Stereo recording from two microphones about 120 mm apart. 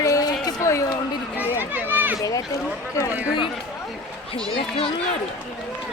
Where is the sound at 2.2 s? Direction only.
30° left (ahead or behind).